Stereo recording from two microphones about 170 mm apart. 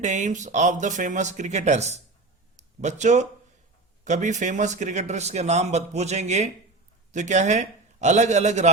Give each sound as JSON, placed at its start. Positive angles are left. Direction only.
{"t": 0.0, "sound": "a man's voice", "side_deg": -45}